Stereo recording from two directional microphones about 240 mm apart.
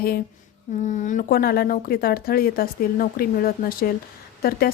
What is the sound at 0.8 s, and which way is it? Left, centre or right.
A woman's voice, left.